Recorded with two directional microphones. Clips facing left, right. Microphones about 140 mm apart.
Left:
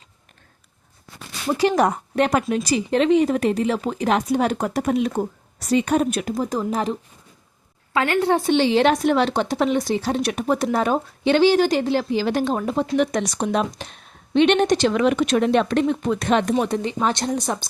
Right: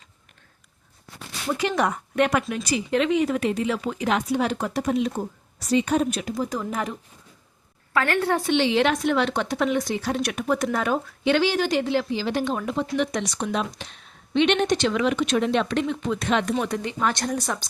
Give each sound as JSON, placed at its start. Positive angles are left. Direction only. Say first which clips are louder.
{"t": 1.5, "sound": "a woman's voice", "louder": "left 5 dB", "side_deg": 35}
{"t": 7.9, "sound": "a woman's voice", "louder": "left 3 dB", "side_deg": 20}
{"t": 8.4, "sound": "speech", "louder": "left 3 dB", "side_deg": 35}
{"t": 12.1, "sound": "a woman's voice", "louder": "left 4 dB", "side_deg": 50}
{"t": 12.5, "sound": "a woman's voice", "louder": "left 4 dB", "side_deg": 35}